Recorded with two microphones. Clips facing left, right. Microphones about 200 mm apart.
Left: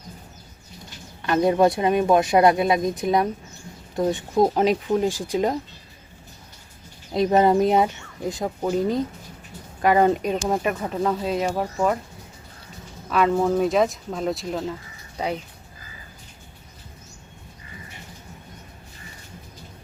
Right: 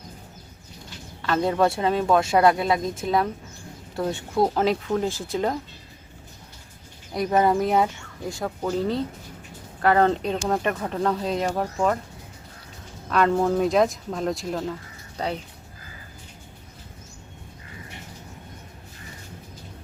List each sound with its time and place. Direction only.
1.2 s speech: 20° left (ahead or behind)
7.1 s speech: 25° left (ahead or behind); by 11.9 s 5° left (ahead or behind)
13.1 s speech: 5° left (ahead or behind)